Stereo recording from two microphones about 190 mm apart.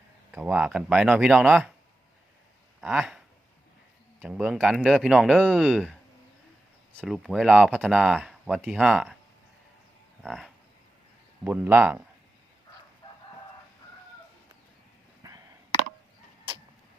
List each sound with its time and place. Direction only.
0.3 s speech: 10° right (ahead or behind)
2.8 s speech: centre (ahead or behind)
10.2 s speech: centre (ahead or behind)
15.2 s a sound: 20° right (ahead or behind)